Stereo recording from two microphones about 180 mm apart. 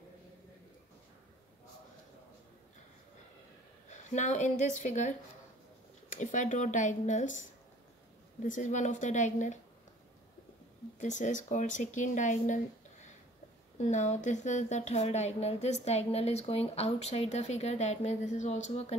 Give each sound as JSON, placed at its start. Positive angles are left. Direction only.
{"t": 3.9, "sound": "a woman's voice", "side_deg": 40}
{"t": 8.5, "sound": "speech", "side_deg": 45}
{"t": 11.0, "sound": "speech", "side_deg": 45}
{"t": 13.7, "sound": "speech", "side_deg": 40}